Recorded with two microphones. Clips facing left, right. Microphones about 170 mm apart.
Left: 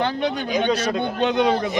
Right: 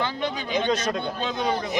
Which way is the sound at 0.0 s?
55° left (ahead or behind).